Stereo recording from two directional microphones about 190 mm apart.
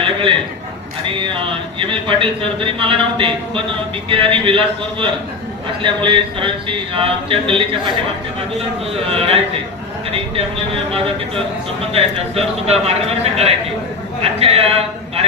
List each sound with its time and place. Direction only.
0.0 s a sound: 25° right (ahead or behind)
1.0 s speech: 25° right (ahead or behind)
9.1 s a man's voice: 30° right (ahead or behind)
11.9 s a man's voice: 30° right (ahead or behind)